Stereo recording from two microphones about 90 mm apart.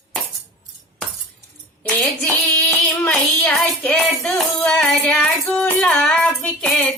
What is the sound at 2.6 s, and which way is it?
Music, 10° left (ahead or behind).